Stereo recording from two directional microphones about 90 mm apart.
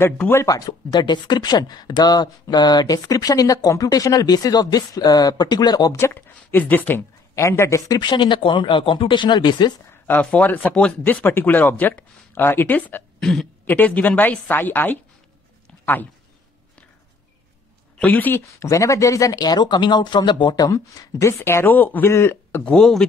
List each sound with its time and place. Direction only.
0.0 s speech: 25° left (ahead or behind)
0.5 s speech: 45° left (ahead or behind)
5.9 s speech: 25° left (ahead or behind)
7.3 s a man's voice: 30° left (ahead or behind)
8.0 s speech: 60° left (ahead or behind)
10.0 s speech: 20° left (ahead or behind)
10.7 s speech: 5° left (ahead or behind)
11.1 s speech: 20° left (ahead or behind)
17.9 s speech: 20° left (ahead or behind)
18.6 s speech: 35° left (ahead or behind); by 20.7 s 55° left (ahead or behind)
20.7 s speech: 35° left (ahead or behind)
22.7 s speech: 5° left (ahead or behind)